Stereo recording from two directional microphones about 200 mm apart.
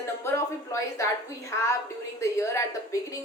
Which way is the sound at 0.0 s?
15° left (ahead or behind).